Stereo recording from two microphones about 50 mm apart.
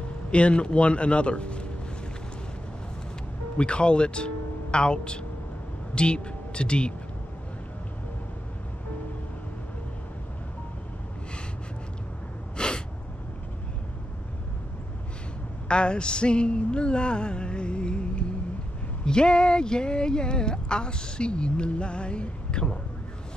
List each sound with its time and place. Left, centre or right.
0.3 s music: left
3.5 s speech: left
12.5 s sneeze: centre
15.7 s music: centre
19.0 s speech: centre